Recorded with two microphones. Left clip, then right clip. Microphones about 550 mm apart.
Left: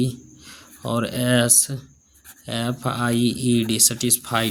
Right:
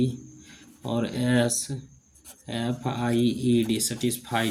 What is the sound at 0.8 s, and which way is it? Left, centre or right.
Speech, left.